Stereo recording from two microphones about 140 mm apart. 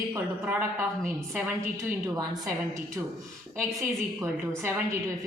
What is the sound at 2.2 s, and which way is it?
A woman's voice, 25° right (ahead or behind).